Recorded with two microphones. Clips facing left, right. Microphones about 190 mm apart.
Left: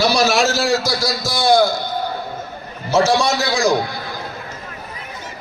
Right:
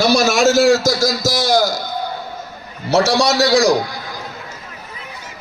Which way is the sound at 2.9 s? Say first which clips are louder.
Right 1 dB; 70° right (ahead or behind).